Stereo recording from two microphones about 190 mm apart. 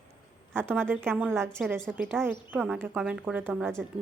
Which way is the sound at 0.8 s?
10° right (ahead or behind).